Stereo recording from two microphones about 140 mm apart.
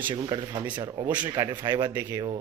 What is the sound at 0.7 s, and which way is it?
Speech, 30° right (ahead or behind).